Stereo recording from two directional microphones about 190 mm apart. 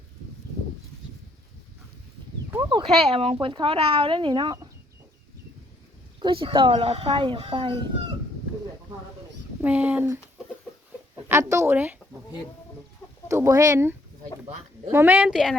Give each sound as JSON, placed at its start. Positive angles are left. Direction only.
{"t": 2.6, "sound": "a child's voice", "side_deg": -25}
{"t": 6.1, "sound": "a child's voice", "side_deg": -25}
{"t": 9.6, "sound": "a woman's voice", "side_deg": -10}
{"t": 11.3, "sound": "a woman's voice", "side_deg": -15}
{"t": 13.2, "sound": "a woman's voice", "side_deg": -15}